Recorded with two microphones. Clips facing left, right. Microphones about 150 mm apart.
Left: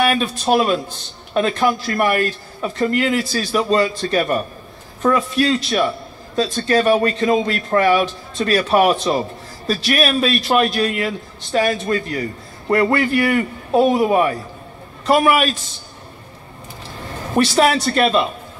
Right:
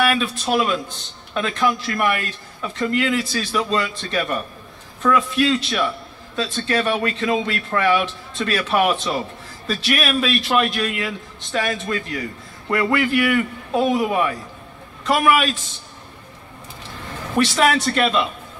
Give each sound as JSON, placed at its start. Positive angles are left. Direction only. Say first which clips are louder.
{"t": 0.0, "sound": "a man's voice", "louder": "left 2 dB", "side_deg": 35}
{"t": 17.4, "sound": "a man's voice", "louder": "left 3 dB", "side_deg": 35}